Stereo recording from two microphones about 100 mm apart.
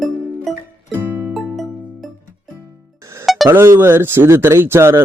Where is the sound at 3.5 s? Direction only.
25° right (ahead or behind).